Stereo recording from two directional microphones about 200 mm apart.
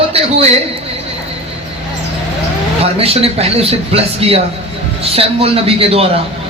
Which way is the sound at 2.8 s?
30° right (ahead or behind).